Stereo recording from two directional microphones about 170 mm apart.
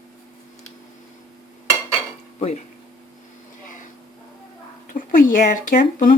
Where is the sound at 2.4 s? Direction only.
40° left (ahead or behind).